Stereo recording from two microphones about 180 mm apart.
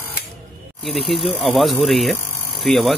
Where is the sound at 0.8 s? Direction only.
Centre (ahead or behind).